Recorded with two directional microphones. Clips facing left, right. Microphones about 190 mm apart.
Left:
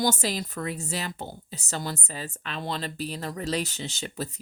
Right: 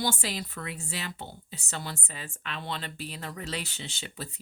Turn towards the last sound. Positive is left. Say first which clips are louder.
# left 6 dB
turn(degrees=40)  # may be behind; listen again after turning